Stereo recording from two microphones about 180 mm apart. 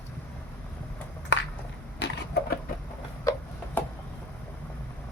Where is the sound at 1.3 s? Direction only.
90° left.